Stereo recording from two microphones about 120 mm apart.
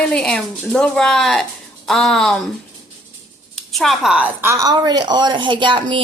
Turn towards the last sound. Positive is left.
turn(degrees=-45)  # may be behind; listen again after turning